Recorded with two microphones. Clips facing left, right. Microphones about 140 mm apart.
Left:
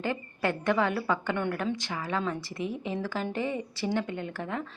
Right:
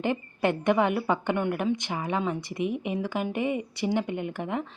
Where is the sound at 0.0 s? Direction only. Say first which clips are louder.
Right 4 dB; 20° right (ahead or behind).